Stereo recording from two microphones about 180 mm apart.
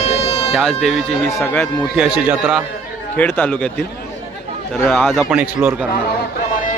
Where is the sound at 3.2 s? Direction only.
10° left (ahead or behind).